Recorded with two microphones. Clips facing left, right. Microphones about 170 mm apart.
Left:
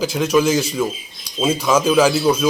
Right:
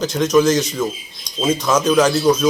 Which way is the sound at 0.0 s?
5° left (ahead or behind).